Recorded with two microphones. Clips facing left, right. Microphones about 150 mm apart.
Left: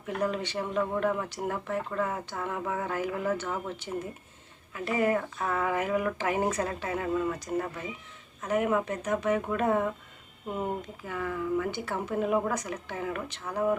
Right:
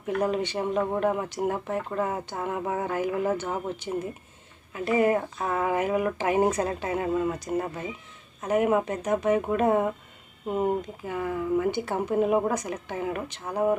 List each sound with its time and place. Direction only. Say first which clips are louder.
0.2 s speech: right 3 dB; 20° right (ahead or behind)
8.4 s speech: right 4 dB; 20° right (ahead or behind)